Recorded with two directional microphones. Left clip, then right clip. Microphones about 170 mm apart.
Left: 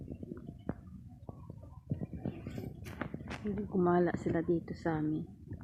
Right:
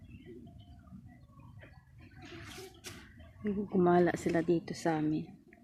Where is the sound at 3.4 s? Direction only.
35° right (ahead or behind).